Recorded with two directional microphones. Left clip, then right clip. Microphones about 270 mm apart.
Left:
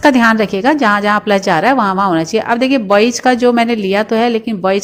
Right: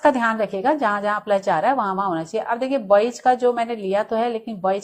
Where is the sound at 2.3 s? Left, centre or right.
Left.